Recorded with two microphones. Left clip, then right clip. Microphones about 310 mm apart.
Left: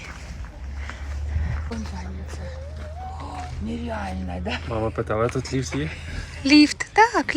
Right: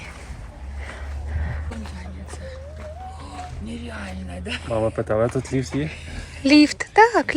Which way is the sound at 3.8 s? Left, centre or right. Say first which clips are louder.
Left 5 dB; left.